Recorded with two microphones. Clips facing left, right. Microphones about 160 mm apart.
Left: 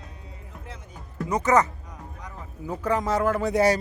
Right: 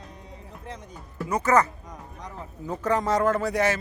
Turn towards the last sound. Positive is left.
turn(degrees=25)  # may be behind; listen again after turning